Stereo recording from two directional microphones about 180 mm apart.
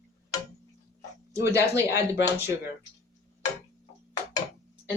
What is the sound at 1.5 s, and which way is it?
Speech, 15° right (ahead or behind).